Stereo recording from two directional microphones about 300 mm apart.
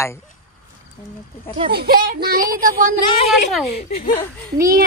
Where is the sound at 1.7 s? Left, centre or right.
Right.